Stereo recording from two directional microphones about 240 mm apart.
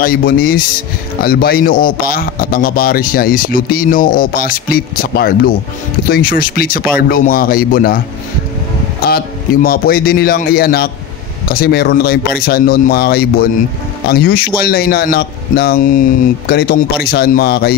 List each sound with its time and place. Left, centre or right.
0.0 s a man's voice: left
9.0 s a man's voice: left